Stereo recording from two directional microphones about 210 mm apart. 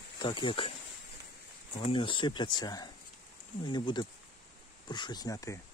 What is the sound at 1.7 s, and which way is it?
Speech, 25° left (ahead or behind).